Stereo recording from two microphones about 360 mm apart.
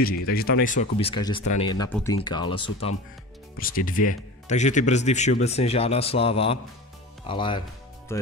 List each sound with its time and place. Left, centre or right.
0.0 s speech: left; by 8.3 s centre